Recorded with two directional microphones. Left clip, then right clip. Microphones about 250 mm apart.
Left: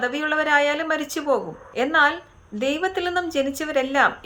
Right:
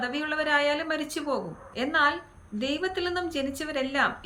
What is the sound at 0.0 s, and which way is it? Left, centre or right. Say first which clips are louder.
A woman's voice: left 6 dB; centre.